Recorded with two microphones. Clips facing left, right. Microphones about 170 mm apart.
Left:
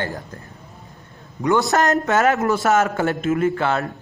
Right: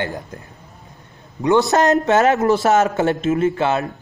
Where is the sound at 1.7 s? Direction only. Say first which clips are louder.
Right 3 dB; 20° right (ahead or behind).